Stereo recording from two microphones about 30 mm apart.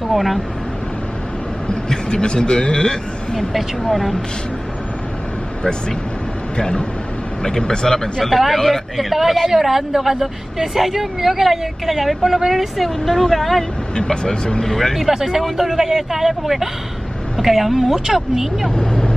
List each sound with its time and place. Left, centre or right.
0.1 s speech: centre
1.7 s a man's voice: left
6.5 s speech: left
8.3 s a man's voice: centre
8.5 s speech: centre
8.9 s a man's voice: centre
12.7 s speech: centre
14.0 s speech: left
14.6 s speech: centre
15.1 s speech: centre
17.9 s speech: centre
18.8 s vehicle: left